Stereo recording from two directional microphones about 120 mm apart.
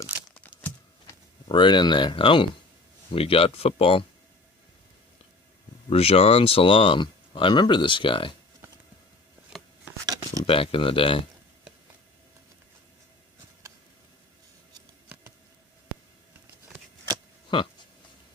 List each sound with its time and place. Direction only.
1.0 s speech: 40° left (ahead or behind)
5.9 s speech: 55° left (ahead or behind)
10.4 s speech: 50° left (ahead or behind)
17.5 s speech: 40° left (ahead or behind)